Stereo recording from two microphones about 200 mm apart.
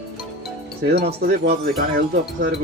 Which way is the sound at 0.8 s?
50° right (ahead or behind).